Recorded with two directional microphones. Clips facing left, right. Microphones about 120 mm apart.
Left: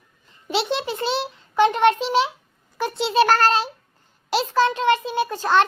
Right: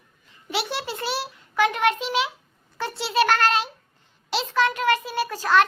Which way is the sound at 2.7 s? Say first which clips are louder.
Left 4 dB; 20° left (ahead or behind).